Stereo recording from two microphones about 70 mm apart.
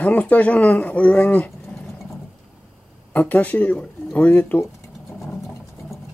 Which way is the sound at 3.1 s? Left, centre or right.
Left.